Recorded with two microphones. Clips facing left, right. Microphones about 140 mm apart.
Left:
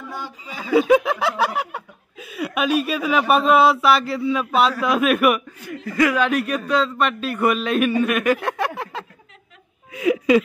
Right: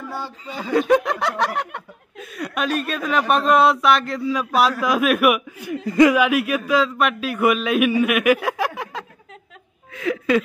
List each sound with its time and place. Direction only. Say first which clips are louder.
0.2 s speech: right 3 dB; 10° left (ahead or behind)
5.6 s speech: right 5 dB; 20° right (ahead or behind)
6.1 s speech: right 2 dB; 5° right (ahead or behind)
9.9 s a sound: left 3 dB; 10° left (ahead or behind)